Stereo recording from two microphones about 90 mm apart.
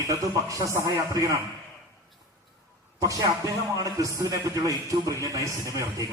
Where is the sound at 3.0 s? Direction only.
40° right (ahead or behind).